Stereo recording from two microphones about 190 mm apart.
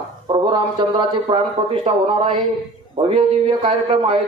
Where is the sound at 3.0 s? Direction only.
30° right (ahead or behind).